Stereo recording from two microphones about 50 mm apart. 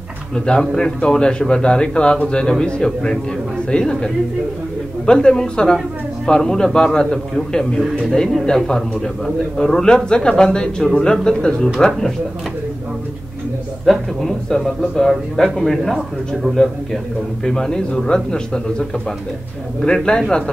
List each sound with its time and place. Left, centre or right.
0.6 s a man's voice: centre
13.9 s a man's voice: centre
16.5 s a man's voice: right
17.5 s a man's voice: centre